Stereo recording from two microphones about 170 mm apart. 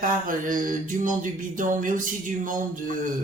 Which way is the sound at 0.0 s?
55° right (ahead or behind).